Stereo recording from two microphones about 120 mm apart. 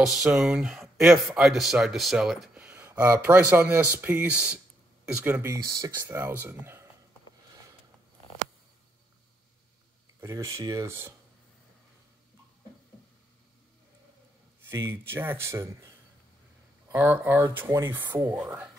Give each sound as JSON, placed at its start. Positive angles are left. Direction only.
{"t": 0.0, "sound": "speech", "side_deg": -5}
{"t": 5.4, "sound": "speech", "side_deg": -25}
{"t": 10.2, "sound": "speech", "side_deg": -25}
{"t": 14.7, "sound": "speech", "side_deg": -20}
{"t": 16.9, "sound": "speech", "side_deg": -15}